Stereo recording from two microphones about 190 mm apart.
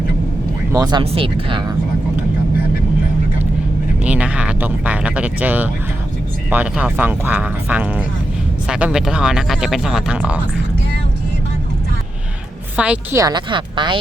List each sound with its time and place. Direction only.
0.7 s speech: 20° right (ahead or behind)
4.0 s speech: 5° right (ahead or behind)
12.7 s speech: 5° right (ahead or behind)
13.1 s speech: 20° right (ahead or behind)